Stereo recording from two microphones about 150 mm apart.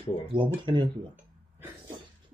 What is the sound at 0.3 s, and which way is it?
Speech, 35° right (ahead or behind).